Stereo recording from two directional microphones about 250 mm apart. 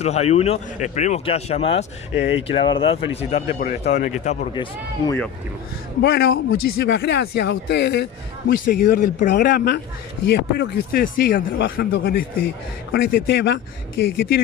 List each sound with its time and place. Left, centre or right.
0.0 s speech: left
5.0 s speech: centre
6.0 s a man's voice: left